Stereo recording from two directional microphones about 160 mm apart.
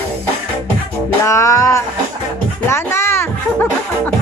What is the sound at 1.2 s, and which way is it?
Music, 20° left (ahead or behind).